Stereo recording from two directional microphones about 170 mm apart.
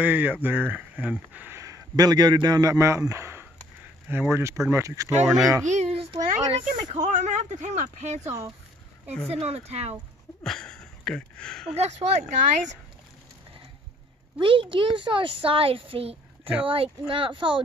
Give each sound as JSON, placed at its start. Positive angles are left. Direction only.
{"t": 0.0, "sound": "speech", "side_deg": -10}
{"t": 5.7, "sound": "a sound", "side_deg": -40}
{"t": 7.1, "sound": "speech", "side_deg": -45}
{"t": 10.4, "sound": "speech", "side_deg": 5}
{"t": 11.7, "sound": "speech", "side_deg": -40}
{"t": 14.4, "sound": "speech", "side_deg": -30}